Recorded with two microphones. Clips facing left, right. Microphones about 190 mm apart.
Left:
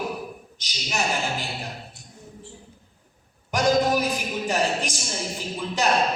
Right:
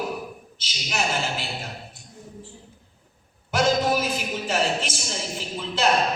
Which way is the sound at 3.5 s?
15° left (ahead or behind).